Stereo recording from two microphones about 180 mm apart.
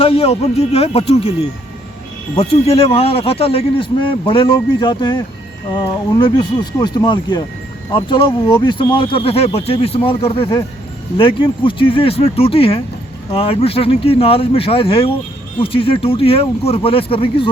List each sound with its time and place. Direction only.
0.0 s a man's voice: 30° left (ahead or behind)
2.4 s a man's voice: 35° left (ahead or behind)